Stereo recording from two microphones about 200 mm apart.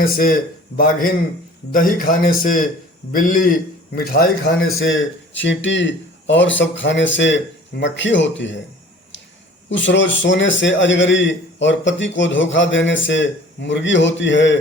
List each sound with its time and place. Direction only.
0.0 s a man's voice: 45° left (ahead or behind)
4.8 s speech: 70° left (ahead or behind)
9.6 s a man's voice: 65° left (ahead or behind)